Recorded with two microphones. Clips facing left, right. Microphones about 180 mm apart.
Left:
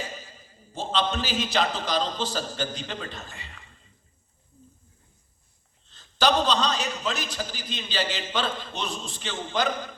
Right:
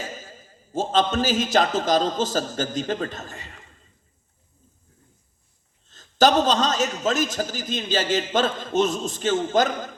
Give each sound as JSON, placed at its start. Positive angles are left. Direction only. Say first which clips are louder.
{"t": 0.0, "sound": "a man's voice", "louder": "right 2 dB", "side_deg": -45}
{"t": 5.9, "sound": "a man's voice", "louder": "right 5 dB", "side_deg": -45}